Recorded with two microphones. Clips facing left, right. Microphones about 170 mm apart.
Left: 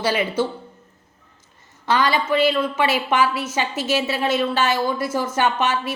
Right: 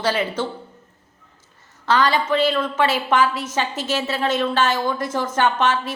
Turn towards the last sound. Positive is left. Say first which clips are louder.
# right 1 dB
turn(degrees=10)  # may be behind; listen again after turning